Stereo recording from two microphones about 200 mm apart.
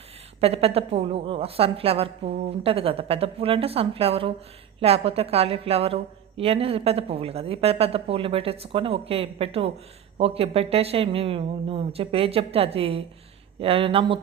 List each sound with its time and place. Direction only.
0.3 s speech: 30° right (ahead or behind)